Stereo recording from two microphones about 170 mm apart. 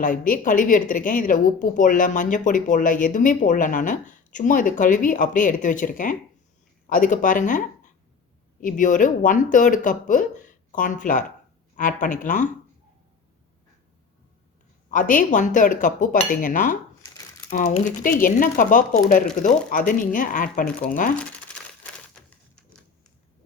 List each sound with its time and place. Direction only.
0.0 s a woman's voice: 50° left (ahead or behind)
8.6 s a woman's voice: 50° left (ahead or behind)
14.8 s a woman's voice: 50° left (ahead or behind)
21.5 s a sound: 5° left (ahead or behind)
22.1 s typewriter: 5° left (ahead or behind)